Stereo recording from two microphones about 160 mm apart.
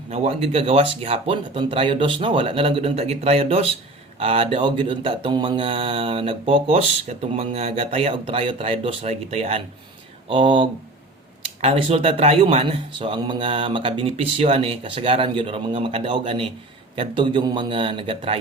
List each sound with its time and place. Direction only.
0.1 s speech: 45° right (ahead or behind)